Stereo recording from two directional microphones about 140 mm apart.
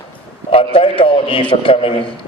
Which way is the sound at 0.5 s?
40° left (ahead or behind).